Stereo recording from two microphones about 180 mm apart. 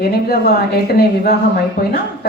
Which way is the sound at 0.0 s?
60° left (ahead or behind).